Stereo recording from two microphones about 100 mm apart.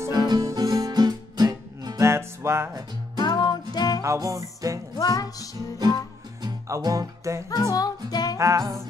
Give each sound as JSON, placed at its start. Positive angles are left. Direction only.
{"t": 0.0, "sound": "guitar", "side_deg": -40}
{"t": 2.0, "sound": "music", "side_deg": -25}
{"t": 3.2, "sound": "music", "side_deg": 45}
{"t": 4.0, "sound": "music", "side_deg": -30}
{"t": 4.9, "sound": "music", "side_deg": 40}
{"t": 6.4, "sound": "music", "side_deg": -40}
{"t": 7.4, "sound": "music", "side_deg": 35}
{"t": 8.4, "sound": "music", "side_deg": -35}